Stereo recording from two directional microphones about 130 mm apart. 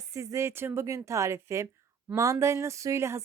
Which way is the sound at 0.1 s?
25° right (ahead or behind).